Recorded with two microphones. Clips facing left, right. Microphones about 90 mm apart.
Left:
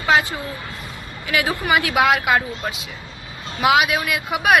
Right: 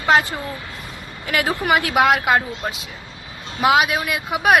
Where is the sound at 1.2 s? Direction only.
45° right (ahead or behind).